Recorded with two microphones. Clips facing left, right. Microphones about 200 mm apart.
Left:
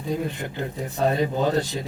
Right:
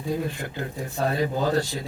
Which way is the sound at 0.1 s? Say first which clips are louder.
Left 1 dB; 20° left (ahead or behind).